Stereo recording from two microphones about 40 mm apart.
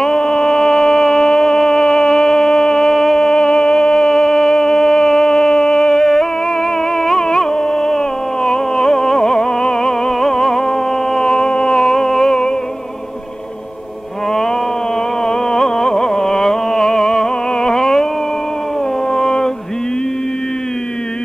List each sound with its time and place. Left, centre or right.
0.0 s a sound: centre
7.0 s carnatic music: centre
8.5 s music: centre
15.2 s music: centre
19.1 s mantra: centre